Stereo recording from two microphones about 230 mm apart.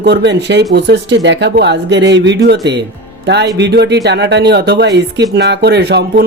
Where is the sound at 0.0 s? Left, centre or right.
Right.